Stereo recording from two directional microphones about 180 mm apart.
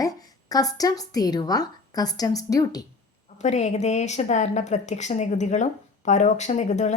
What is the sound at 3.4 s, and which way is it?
A woman's voice, 40° left (ahead or behind).